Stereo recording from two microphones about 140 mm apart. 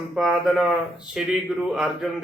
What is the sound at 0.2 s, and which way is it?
A man's voice, centre (ahead or behind).